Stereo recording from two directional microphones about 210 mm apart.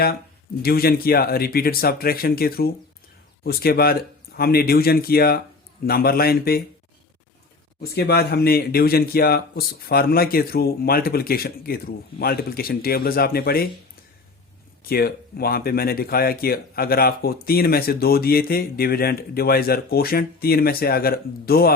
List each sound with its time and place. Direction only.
0.6 s speech: 45° left (ahead or behind)
7.8 s speech: 50° left (ahead or behind)
14.8 s speech: 45° left (ahead or behind)